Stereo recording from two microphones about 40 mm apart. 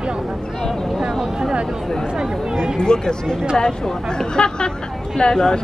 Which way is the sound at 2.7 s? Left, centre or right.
Centre.